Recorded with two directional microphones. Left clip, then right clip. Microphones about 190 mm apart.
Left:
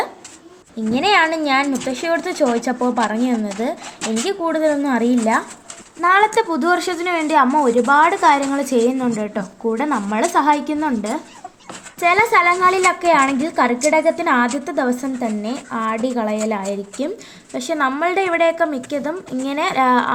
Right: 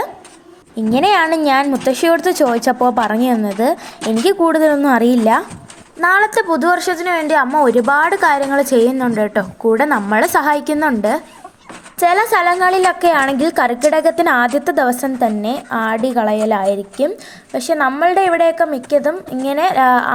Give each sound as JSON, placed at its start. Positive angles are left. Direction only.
{"t": 0.9, "sound": "a woman's voice", "side_deg": -20}